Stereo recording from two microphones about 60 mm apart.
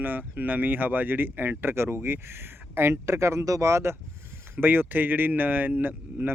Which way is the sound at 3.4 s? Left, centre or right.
Right.